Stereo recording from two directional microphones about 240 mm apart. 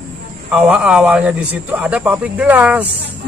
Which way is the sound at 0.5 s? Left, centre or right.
Centre.